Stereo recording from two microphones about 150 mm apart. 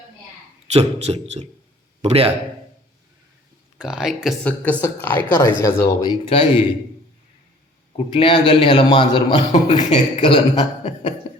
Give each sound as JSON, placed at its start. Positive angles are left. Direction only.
{"t": 0.7, "sound": "a man's voice", "side_deg": -45}
{"t": 3.8, "sound": "speech", "side_deg": -5}
{"t": 4.4, "sound": "a woman's voice", "side_deg": 10}
{"t": 6.2, "sound": "a man's voice", "side_deg": 35}
{"t": 8.1, "sound": "a man's voice", "side_deg": 35}